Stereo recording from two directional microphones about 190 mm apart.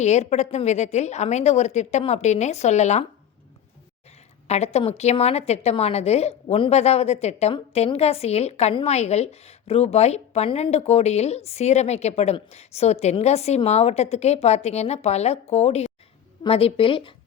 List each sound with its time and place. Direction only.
0.0 s a woman's voice: 35° left (ahead or behind)
4.4 s a woman's voice: 35° left (ahead or behind)